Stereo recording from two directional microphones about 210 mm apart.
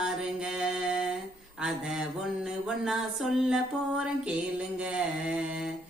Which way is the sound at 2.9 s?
Centre (ahead or behind).